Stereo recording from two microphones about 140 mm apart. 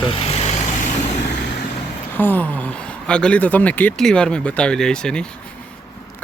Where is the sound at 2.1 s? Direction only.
15° left (ahead or behind).